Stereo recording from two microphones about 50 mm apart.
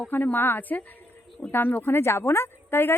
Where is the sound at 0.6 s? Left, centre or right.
Left.